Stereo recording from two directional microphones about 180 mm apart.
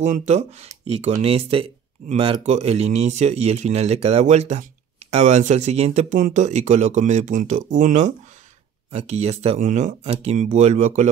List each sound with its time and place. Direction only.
0.0 s speech: 40° right (ahead or behind)